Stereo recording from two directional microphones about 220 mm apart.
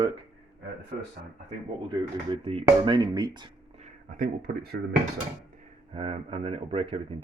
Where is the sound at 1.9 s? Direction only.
20° right (ahead or behind).